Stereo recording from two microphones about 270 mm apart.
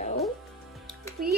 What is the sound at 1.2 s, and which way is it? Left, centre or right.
Speech, right.